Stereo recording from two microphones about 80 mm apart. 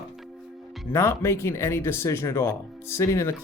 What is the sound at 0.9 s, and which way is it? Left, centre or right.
Speech, left.